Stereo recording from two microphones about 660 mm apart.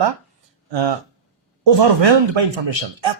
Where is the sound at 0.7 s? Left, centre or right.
Right.